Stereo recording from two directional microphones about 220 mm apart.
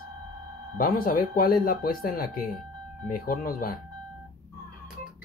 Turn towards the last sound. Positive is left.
turn(degrees=40)  # may be behind; listen again after turning